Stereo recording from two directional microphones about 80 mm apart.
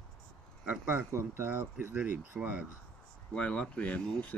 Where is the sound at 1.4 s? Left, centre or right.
Right.